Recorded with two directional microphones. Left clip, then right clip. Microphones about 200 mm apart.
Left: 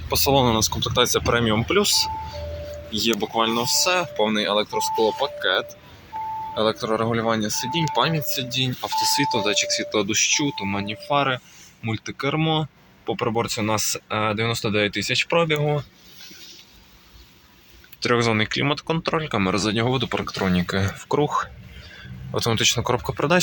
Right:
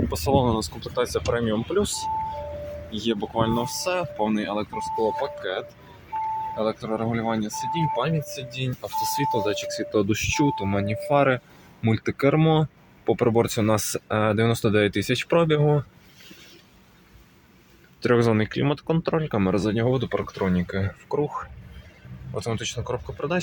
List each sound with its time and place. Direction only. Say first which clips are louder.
0.1 s speech: left 6 dB; 5° right (ahead or behind); by 15.8 s 30° right (ahead or behind)
18.0 s speech: left 1 dB; 25° right (ahead or behind); by 23.4 s 5° left (ahead or behind)